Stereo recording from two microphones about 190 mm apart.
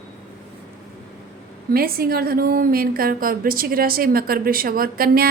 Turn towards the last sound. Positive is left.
turn(degrees=-50)  # may be behind; listen again after turning